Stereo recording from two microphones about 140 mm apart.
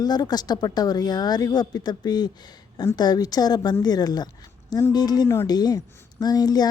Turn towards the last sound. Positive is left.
turn(degrees=30)  # may be behind; listen again after turning